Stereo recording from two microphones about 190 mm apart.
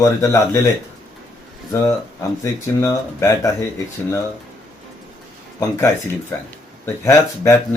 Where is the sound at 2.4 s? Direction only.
15° left (ahead or behind).